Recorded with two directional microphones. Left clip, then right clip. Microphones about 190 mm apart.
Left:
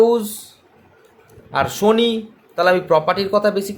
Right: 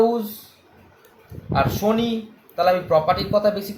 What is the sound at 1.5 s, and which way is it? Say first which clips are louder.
A man's voice: left 4 dB; 50° left (ahead or behind).